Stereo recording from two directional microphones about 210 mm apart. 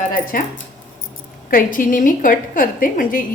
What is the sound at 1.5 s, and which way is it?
A woman's voice, 40° left (ahead or behind).